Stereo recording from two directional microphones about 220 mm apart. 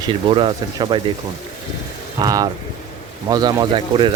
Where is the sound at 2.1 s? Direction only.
15° right (ahead or behind).